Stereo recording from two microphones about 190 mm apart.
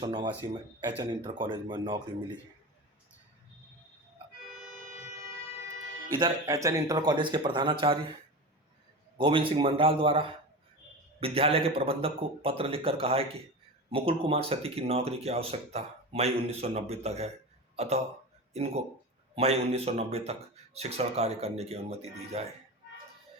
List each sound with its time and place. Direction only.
0.0 s a man's voice: 25° right (ahead or behind)
6.1 s a man's voice: 20° right (ahead or behind)
9.1 s a man's voice: 25° right (ahead or behind)